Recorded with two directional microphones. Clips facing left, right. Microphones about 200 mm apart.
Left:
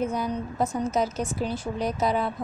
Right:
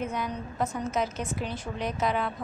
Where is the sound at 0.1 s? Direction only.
35° left (ahead or behind).